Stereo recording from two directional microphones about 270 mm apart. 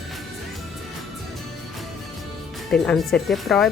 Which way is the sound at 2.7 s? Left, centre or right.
Centre.